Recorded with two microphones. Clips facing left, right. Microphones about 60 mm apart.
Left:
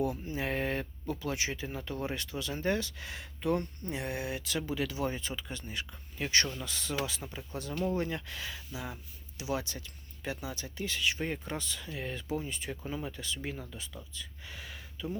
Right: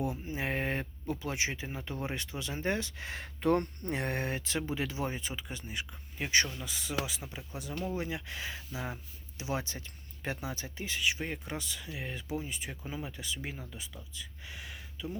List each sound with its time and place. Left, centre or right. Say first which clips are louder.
0.0 s speech: left 2 dB; right
3.4 s speech: right 3 dB; right
4.4 s speech: left 1 dB; right; by 8.2 s centre
8.3 s speech: right 1 dB; right; by 15.2 s centre